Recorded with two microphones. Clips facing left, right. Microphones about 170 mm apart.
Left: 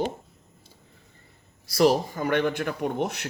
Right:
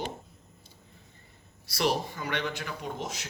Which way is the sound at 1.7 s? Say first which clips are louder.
Left 8 dB; 45° left (ahead or behind).